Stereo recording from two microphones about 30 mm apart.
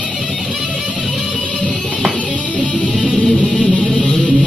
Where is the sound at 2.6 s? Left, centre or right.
Left.